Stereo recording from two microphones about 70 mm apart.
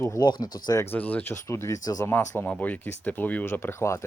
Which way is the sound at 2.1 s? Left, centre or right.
Left.